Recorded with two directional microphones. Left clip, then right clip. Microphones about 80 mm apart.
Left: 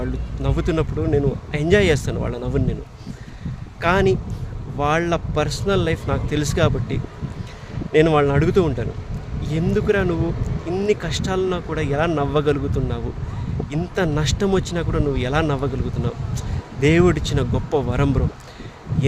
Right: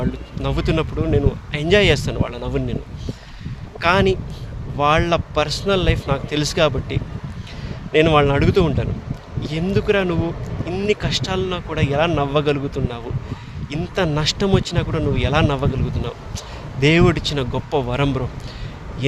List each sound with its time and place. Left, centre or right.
0.0 s speech: left
3.8 s speech: left